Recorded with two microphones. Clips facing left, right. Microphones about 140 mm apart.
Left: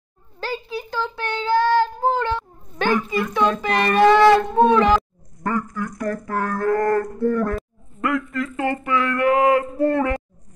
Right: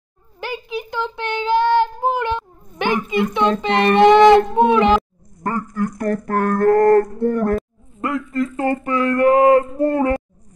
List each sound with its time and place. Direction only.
0.4 s speech: 15° right (ahead or behind)
5.8 s speech: 55° right (ahead or behind)
7.2 s speech: 20° right (ahead or behind)
8.0 s speech: 35° right (ahead or behind)